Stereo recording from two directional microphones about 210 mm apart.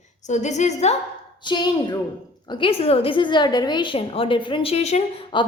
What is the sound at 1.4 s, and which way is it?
A woman's voice, 20° left (ahead or behind).